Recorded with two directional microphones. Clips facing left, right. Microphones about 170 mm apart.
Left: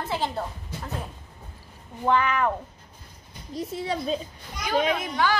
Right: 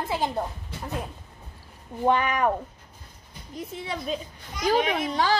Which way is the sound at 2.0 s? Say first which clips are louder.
Right 1 dB; 20° right (ahead or behind).